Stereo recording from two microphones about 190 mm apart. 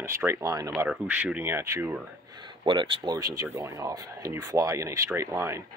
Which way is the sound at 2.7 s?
25° right (ahead or behind).